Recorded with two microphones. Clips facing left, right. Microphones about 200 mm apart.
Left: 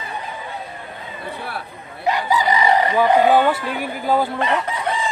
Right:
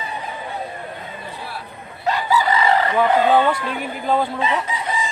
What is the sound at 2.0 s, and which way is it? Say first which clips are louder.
Speech: even; 15° left (ahead or behind).